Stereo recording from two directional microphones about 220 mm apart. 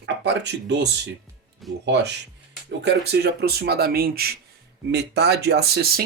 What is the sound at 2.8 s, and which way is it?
Speech, 50° right (ahead or behind).